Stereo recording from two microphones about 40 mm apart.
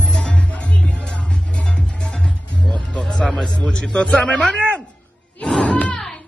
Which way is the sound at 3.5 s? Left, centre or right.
Left.